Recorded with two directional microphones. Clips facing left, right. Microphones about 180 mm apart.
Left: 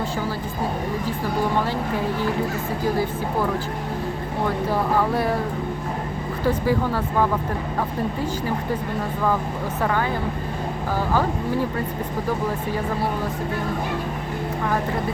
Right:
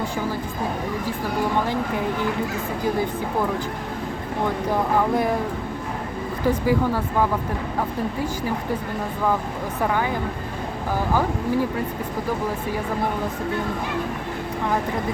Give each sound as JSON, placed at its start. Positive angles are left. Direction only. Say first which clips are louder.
{"t": 6.4, "sound": "speech", "louder": "right 1 dB", "side_deg": -15}
{"t": 9.8, "sound": "speech", "louder": "even", "side_deg": -15}